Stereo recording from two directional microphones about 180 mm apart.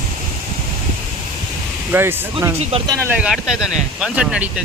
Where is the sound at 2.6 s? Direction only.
35° right (ahead or behind).